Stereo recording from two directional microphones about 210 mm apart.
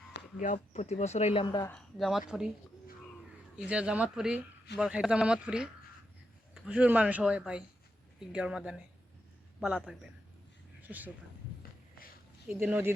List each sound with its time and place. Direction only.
0.3 s speech: 35° left (ahead or behind); by 1.7 s 20° left (ahead or behind)
1.7 s a man's voice: centre (ahead or behind)
3.7 s a man's voice: 5° right (ahead or behind)
10.8 s a sound: 10° right (ahead or behind)
12.5 s speech: 10° right (ahead or behind)